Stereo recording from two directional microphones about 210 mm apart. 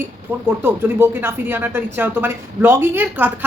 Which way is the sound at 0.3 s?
10° right (ahead or behind).